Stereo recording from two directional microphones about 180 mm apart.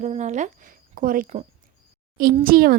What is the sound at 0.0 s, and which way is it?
A woman's voice, 40° right (ahead or behind).